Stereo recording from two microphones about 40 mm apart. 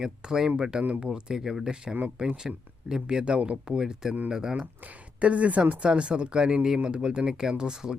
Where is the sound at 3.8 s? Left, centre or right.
Centre.